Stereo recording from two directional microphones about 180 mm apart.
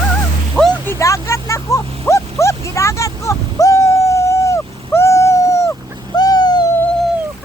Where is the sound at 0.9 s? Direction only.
15° left (ahead or behind).